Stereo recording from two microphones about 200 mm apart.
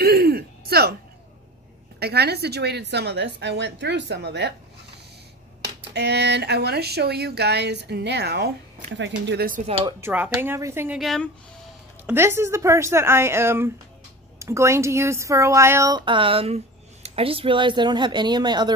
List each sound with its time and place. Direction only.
0.0 s a sound: 50° right (ahead or behind)
2.0 s speech: 55° right (ahead or behind)
5.8 s speech: 55° right (ahead or behind)
9.9 s speech: 10° right (ahead or behind)
11.0 s speech: centre (ahead or behind)
12.1 s speech: 15° right (ahead or behind)